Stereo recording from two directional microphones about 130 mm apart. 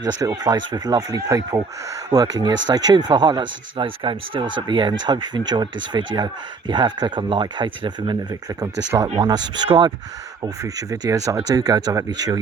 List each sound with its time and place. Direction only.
0.0 s speech: 30° right (ahead or behind)
9.6 s speech: 40° right (ahead or behind)
10.4 s speech: 25° right (ahead or behind)